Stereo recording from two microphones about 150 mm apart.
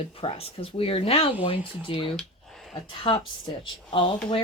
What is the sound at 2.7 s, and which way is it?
Speech, 35° left (ahead or behind).